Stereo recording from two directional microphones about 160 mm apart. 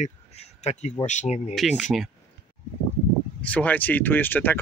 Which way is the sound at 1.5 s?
Centre (ahead or behind).